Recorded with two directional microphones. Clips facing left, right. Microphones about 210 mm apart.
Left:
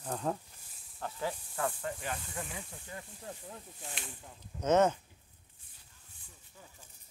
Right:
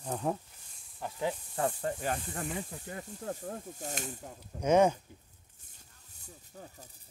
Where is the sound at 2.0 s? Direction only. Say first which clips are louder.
Right 5 dB; 40° right (ahead or behind).